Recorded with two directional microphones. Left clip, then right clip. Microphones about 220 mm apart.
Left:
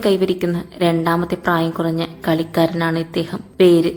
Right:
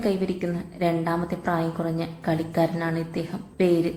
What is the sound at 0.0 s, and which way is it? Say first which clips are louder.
A woman's voice: left 9 dB; 45° left (ahead or behind).